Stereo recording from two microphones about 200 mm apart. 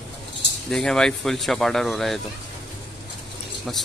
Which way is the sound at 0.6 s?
Centre (ahead or behind).